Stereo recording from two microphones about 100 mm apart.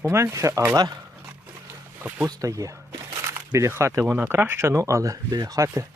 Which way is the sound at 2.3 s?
35° right (ahead or behind).